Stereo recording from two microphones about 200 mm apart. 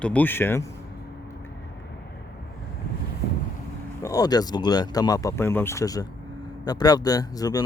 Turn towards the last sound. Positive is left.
turn(degrees=20)  # may be behind; listen again after turning